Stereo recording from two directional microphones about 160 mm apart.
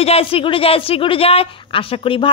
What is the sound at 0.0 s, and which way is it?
A woman's voice, 35° left (ahead or behind).